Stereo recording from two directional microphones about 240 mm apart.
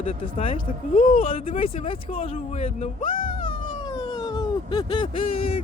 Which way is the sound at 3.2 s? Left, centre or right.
Left.